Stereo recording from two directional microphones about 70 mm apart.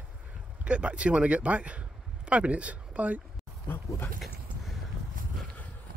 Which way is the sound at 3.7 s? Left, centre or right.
Left.